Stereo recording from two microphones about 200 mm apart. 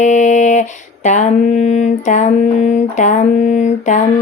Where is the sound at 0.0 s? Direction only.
35° left (ahead or behind).